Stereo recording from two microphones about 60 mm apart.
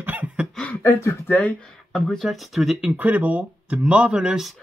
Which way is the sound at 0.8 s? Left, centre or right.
Left.